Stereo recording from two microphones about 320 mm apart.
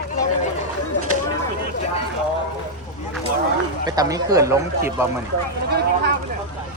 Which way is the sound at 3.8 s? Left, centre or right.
Centre.